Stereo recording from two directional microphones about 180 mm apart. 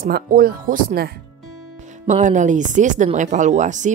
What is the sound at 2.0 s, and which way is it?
Music, 45° right (ahead or behind).